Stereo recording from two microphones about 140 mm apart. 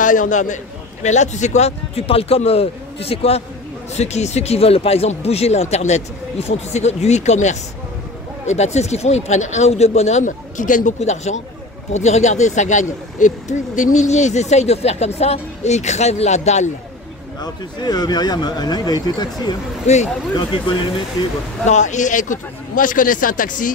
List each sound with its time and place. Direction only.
0.0 s speech: 65° left (ahead or behind)
17.4 s speech: 30° left (ahead or behind)
19.9 s speech: 55° left (ahead or behind)
20.3 s speech: 35° left (ahead or behind)
21.6 s speech: 60° left (ahead or behind)